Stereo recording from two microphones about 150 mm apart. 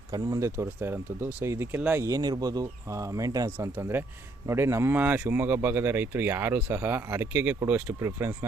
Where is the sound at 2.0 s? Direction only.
25° right (ahead or behind).